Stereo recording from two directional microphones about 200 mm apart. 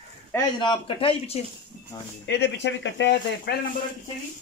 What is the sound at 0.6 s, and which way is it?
Speech, 25° left (ahead or behind).